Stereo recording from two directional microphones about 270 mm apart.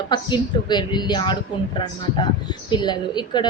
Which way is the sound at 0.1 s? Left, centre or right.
Centre.